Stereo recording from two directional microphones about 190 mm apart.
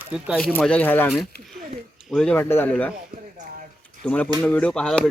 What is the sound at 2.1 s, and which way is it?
Speech, 5° left (ahead or behind).